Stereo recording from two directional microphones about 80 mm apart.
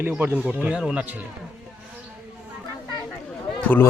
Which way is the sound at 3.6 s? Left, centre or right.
Left.